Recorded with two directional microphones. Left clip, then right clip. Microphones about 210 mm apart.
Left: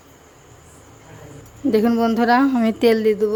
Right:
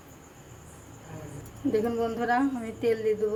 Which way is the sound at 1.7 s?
45° left (ahead or behind).